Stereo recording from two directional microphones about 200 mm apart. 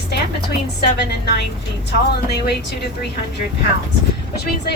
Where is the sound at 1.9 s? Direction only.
55° left (ahead or behind).